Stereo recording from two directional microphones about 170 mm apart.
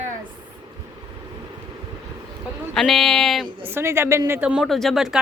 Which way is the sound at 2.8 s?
Centre (ahead or behind).